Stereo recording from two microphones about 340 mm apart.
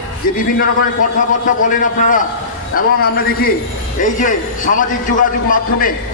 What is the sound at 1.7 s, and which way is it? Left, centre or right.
A man's voice, left.